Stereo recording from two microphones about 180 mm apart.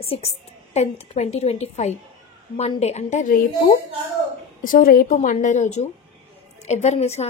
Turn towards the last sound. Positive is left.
turn(degrees=35)  # may be behind; listen again after turning